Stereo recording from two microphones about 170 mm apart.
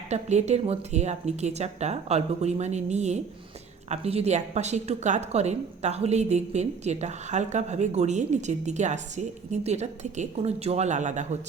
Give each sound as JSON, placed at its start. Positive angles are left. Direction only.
{"t": 0.1, "sound": "a woman's voice", "side_deg": -40}